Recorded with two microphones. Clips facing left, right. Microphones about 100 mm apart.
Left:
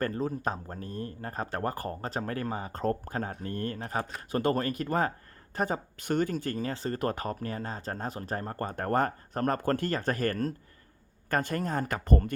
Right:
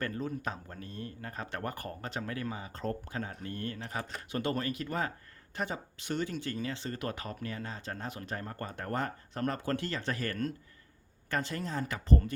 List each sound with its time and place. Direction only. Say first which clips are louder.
0.0 s speech: left 5 dB; 35° left (ahead or behind)